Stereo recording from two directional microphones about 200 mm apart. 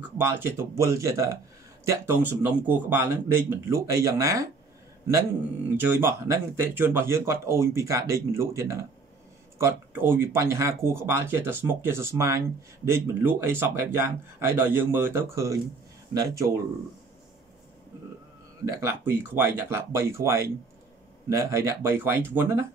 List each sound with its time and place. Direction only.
0.0 s speech: 10° right (ahead or behind)
5.8 s speech: 10° right (ahead or behind)
18.7 s speech: 15° right (ahead or behind)